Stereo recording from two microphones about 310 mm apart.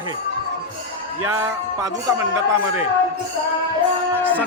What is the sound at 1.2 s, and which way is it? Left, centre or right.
Speech, centre.